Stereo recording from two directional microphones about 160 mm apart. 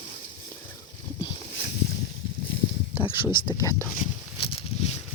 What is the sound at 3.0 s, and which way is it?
Speech, 30° left (ahead or behind).